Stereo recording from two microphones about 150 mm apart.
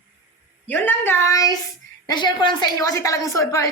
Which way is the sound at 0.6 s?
10° left (ahead or behind).